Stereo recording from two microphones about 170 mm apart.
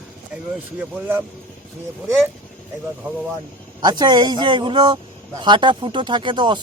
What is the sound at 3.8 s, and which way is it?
A man's voice, 25° right (ahead or behind).